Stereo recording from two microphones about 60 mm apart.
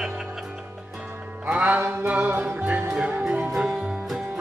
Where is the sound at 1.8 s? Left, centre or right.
Right.